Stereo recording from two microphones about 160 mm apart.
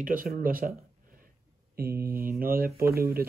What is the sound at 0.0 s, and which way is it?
Speech, 60° right (ahead or behind).